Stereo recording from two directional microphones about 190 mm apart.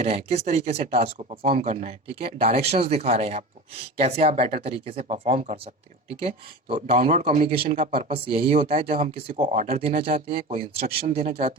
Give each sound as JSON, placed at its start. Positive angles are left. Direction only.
{"t": 0.0, "sound": "speech", "side_deg": -35}